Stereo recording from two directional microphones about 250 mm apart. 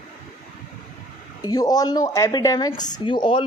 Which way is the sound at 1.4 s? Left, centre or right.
Centre.